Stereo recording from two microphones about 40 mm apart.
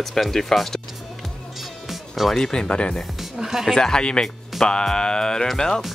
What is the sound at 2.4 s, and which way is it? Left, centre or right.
Speech, left.